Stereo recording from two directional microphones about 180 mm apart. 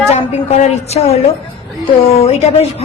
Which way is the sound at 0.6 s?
35° left (ahead or behind).